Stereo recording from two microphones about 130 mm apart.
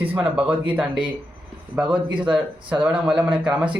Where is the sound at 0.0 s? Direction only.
10° right (ahead or behind).